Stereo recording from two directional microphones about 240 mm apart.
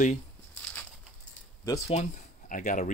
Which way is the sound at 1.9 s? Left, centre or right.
Left.